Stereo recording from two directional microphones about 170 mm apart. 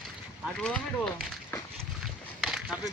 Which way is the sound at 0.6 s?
5° left (ahead or behind).